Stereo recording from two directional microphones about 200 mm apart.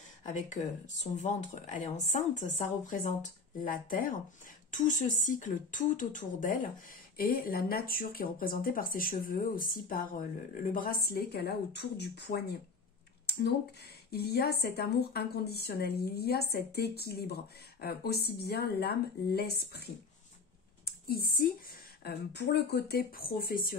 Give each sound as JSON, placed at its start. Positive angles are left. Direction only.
{"t": 0.2, "sound": "speech", "side_deg": 40}
{"t": 14.1, "sound": "speech", "side_deg": 50}
{"t": 20.8, "sound": "a sound", "side_deg": 50}
{"t": 22.0, "sound": "speech", "side_deg": 55}